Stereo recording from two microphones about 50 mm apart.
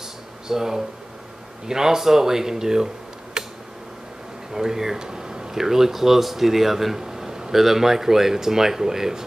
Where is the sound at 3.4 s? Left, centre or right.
Centre.